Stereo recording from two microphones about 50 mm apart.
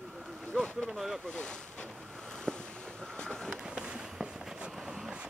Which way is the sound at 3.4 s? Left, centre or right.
Centre.